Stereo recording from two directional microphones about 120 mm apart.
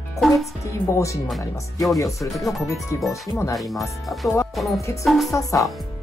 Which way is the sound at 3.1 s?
25° left (ahead or behind).